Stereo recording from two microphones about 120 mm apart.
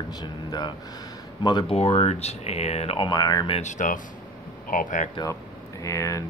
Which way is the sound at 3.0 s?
35° left (ahead or behind).